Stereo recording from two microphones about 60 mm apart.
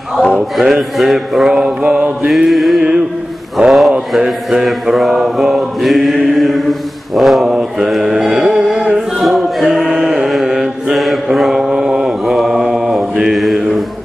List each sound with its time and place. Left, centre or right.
0.6 s mantra: centre
1.6 s mantra: centre
2.2 s mantra: centre
3.6 s mantra: centre
4.1 s chant: centre